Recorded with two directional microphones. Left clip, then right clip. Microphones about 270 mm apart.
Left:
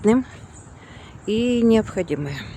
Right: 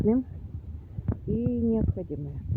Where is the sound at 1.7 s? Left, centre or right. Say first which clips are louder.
Left 11 dB; left.